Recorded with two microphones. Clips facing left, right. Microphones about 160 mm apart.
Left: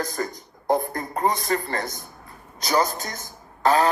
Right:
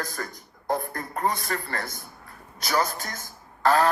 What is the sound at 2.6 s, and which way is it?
A man's voice, 20° left (ahead or behind).